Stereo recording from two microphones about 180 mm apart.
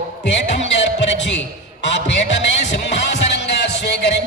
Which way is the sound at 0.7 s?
80° left.